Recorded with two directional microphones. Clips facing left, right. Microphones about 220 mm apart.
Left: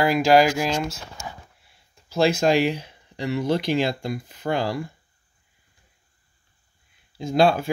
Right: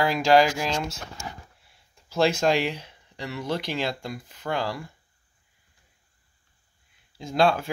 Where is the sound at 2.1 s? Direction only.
5° left (ahead or behind).